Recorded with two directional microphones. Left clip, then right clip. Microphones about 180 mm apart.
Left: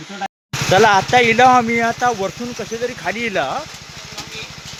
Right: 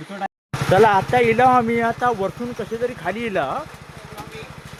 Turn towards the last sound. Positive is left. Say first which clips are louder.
# left 3 dB
turn(degrees=-5)  # may be behind; listen again after turning